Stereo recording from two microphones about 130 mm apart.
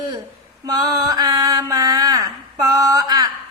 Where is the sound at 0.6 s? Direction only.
30° right (ahead or behind).